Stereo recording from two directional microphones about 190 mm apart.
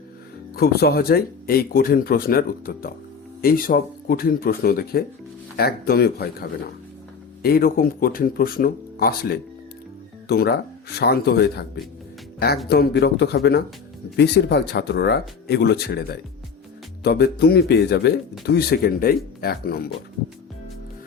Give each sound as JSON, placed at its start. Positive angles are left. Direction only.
{"t": 0.5, "sound": "speech", "side_deg": 55}
{"t": 7.4, "sound": "speech", "side_deg": 50}
{"t": 12.6, "sound": "speech", "side_deg": 55}